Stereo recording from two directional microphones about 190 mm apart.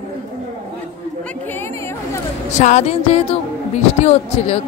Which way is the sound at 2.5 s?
35° left (ahead or behind).